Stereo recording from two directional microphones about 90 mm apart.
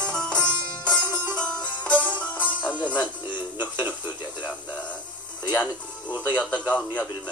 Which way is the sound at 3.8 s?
20° right (ahead or behind).